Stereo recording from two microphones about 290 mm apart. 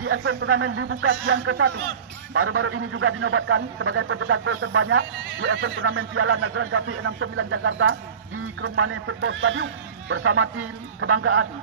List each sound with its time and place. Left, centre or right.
0.0 s a man's voice: right